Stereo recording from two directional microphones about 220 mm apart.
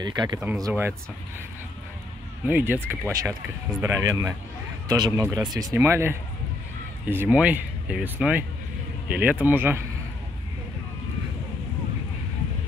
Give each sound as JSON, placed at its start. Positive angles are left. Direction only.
{"t": 0.0, "sound": "speech", "side_deg": -20}
{"t": 2.4, "sound": "speech", "side_deg": -10}